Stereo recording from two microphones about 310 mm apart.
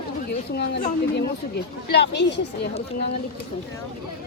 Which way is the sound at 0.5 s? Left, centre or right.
Left.